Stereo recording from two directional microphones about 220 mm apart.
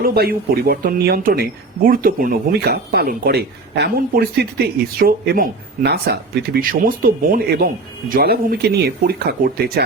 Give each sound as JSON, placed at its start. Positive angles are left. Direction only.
{"t": 0.0, "sound": "speech", "side_deg": -45}